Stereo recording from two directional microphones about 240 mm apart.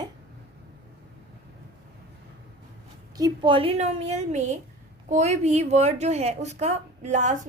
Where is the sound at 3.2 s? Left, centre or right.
Right.